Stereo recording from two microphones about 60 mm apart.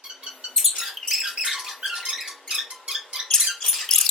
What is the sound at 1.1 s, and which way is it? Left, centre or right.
Squeak, centre.